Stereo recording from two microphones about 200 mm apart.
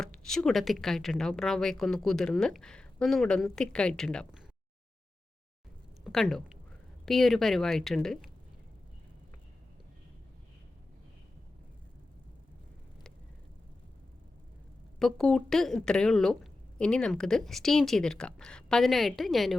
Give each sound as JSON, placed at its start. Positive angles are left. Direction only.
{"t": 0.0, "sound": "speech", "side_deg": 5}
{"t": 6.1, "sound": "speech", "side_deg": 0}
{"t": 14.9, "sound": "speech", "side_deg": 0}